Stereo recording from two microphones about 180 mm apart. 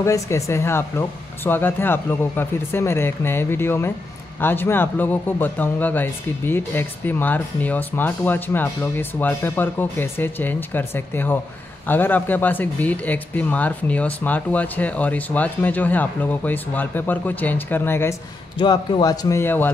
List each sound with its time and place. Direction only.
0.0 s speech: 15° left (ahead or behind)
18.6 s speech: 25° left (ahead or behind)